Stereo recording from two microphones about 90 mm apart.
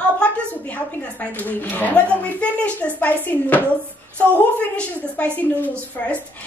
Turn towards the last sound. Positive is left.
turn(degrees=15)  # may be behind; listen again after turning